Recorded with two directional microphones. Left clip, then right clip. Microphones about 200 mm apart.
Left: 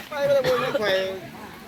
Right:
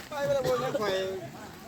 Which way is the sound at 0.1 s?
55° right (ahead or behind).